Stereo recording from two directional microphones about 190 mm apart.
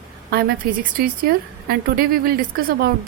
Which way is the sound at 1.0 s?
55° right (ahead or behind).